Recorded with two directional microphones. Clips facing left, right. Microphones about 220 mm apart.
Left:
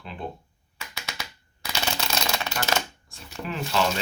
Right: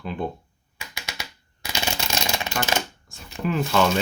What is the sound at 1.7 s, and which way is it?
Shuffling cards, 15° right (ahead or behind).